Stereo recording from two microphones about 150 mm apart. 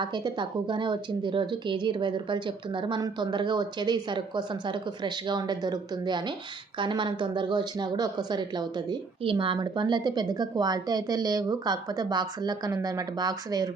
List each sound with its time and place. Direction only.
0.0 s a woman's voice: 30° right (ahead or behind)